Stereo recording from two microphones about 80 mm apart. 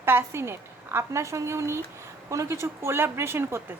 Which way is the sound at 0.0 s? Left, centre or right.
Right.